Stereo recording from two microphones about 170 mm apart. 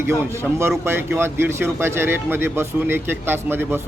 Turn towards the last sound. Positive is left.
turn(degrees=-15)  # may be behind; listen again after turning